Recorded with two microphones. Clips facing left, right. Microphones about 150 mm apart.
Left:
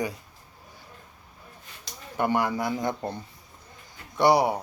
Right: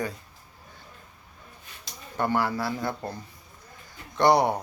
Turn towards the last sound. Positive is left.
turn(degrees=5)  # may be behind; listen again after turning